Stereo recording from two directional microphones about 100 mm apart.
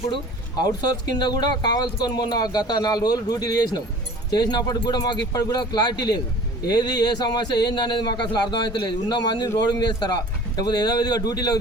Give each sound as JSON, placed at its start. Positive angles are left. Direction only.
{"t": 0.1, "sound": "speech", "side_deg": 45}